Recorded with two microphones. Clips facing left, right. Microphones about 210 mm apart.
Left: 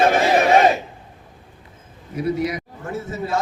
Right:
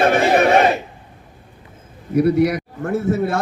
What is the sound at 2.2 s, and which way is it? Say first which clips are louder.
A man's voice: right 7 dB; 65° right (ahead or behind).